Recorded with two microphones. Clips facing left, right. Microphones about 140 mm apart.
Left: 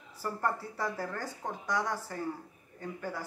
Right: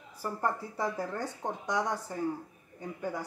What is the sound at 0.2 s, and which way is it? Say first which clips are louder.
Speech: right 1 dB; 15° right (ahead or behind).